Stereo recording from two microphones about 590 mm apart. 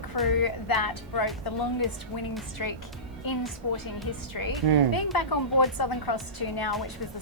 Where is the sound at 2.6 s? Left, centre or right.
Left.